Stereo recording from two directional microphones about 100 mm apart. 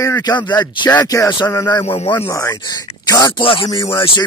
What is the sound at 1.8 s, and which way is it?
Speech, 80° left.